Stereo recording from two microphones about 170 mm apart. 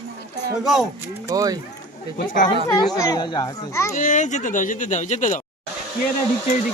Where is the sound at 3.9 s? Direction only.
50° left (ahead or behind).